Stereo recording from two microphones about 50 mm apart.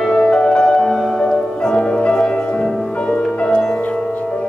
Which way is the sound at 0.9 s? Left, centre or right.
Centre.